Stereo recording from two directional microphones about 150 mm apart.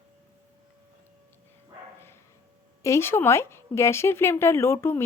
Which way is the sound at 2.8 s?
15° left (ahead or behind).